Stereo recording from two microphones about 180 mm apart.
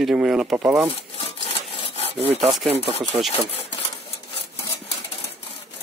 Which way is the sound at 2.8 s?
35° right (ahead or behind).